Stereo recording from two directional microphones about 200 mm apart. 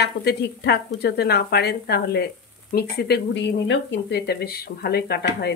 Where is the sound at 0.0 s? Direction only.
55° left (ahead or behind).